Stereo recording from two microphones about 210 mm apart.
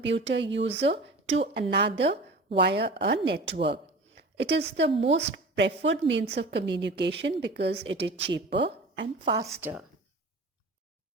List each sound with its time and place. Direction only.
0.0 s a woman's voice: 55° right (ahead or behind)
4.2 s a sound: 55° right (ahead or behind)
4.8 s a woman's voice: 55° right (ahead or behind)
9.2 s a woman's voice: 20° right (ahead or behind)
9.6 s speech: 10° right (ahead or behind)